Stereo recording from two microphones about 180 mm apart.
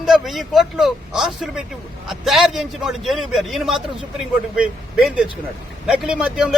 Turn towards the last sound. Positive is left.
turn(degrees=-5)  # may be behind; listen again after turning